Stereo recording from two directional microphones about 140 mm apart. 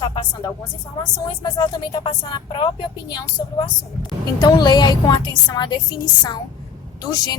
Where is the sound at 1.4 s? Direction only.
35° left (ahead or behind).